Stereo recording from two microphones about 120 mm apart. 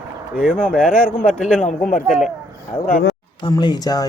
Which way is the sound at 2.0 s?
5° right (ahead or behind).